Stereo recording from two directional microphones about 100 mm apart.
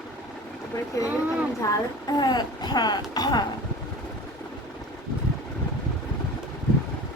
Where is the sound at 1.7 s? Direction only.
45° left (ahead or behind).